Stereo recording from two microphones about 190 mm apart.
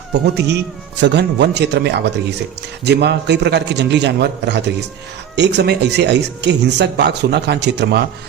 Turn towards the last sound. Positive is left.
turn(degrees=-60)  # may be behind; listen again after turning